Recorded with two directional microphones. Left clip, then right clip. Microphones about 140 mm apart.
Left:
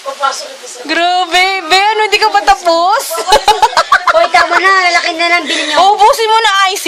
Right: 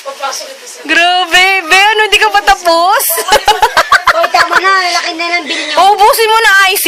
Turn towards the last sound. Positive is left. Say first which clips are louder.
# right 2 dB
turn(degrees=-20)  # may be behind; listen again after turning